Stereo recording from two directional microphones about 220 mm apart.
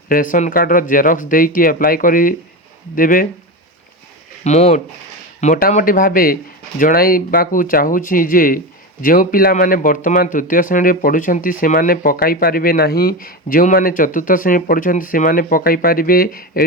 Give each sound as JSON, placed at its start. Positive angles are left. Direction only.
{"t": 0.1, "sound": "speech", "side_deg": 35}
{"t": 4.4, "sound": "speech", "side_deg": 30}